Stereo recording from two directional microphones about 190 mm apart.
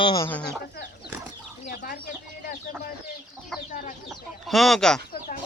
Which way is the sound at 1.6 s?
45° left (ahead or behind).